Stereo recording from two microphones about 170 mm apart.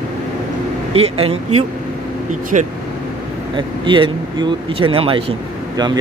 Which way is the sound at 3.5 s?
30° right (ahead or behind).